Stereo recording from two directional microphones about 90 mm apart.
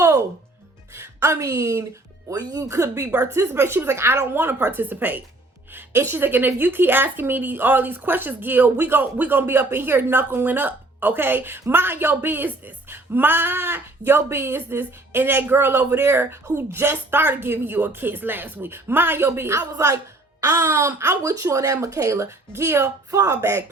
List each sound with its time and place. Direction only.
0.0 s music: 35° right (ahead or behind)
0.9 s a woman's voice: 30° right (ahead or behind)
2.3 s speech: 45° right (ahead or behind); by 19.6 s 30° right (ahead or behind)
19.7 s speech: 40° right (ahead or behind)